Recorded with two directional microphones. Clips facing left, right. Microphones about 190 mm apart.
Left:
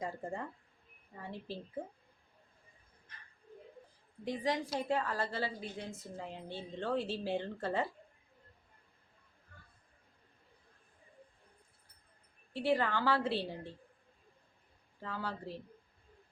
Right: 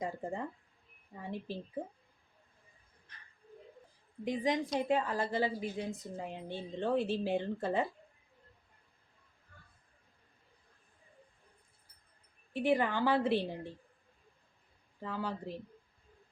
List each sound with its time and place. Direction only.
0.0 s a woman's voice: 15° right (ahead or behind)
4.2 s a woman's voice: 20° right (ahead or behind)
12.5 s a woman's voice: 15° right (ahead or behind)
15.0 s a woman's voice: 15° right (ahead or behind)